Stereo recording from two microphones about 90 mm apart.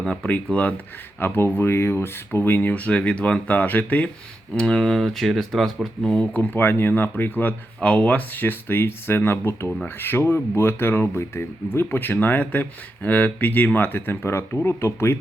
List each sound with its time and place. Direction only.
0.0 s speech: 10° left (ahead or behind)
4.5 s speech: 5° left (ahead or behind)
6.3 s speech: 20° left (ahead or behind)